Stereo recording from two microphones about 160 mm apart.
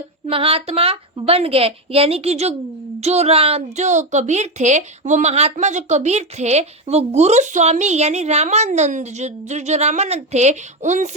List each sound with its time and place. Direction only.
0.3 s a woman's voice: 35° right (ahead or behind)